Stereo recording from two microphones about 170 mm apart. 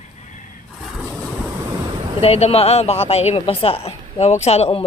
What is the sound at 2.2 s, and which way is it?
A woman's voice, 35° left (ahead or behind).